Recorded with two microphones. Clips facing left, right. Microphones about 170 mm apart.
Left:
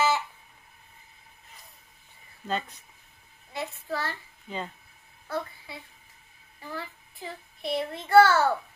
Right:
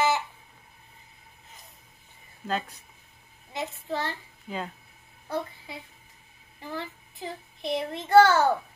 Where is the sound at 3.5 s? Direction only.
20° right (ahead or behind).